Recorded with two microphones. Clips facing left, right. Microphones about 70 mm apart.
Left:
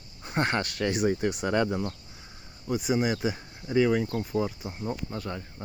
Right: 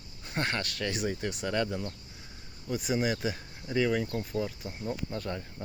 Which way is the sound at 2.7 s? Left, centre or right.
Centre.